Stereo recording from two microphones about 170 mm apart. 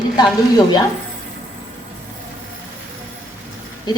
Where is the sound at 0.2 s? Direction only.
25° left (ahead or behind).